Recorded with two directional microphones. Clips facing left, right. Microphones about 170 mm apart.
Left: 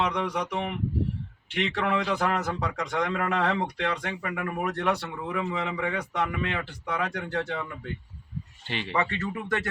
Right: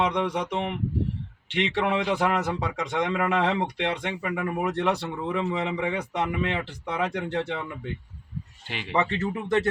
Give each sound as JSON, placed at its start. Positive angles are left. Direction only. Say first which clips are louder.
{"t": 0.0, "sound": "speech", "louder": "right 2 dB", "side_deg": -25}
{"t": 8.7, "sound": "speech", "louder": "even", "side_deg": -10}
{"t": 9.0, "sound": "speech", "louder": "right 4 dB", "side_deg": -25}